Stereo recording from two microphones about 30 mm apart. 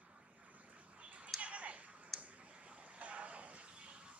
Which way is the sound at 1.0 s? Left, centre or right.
Right.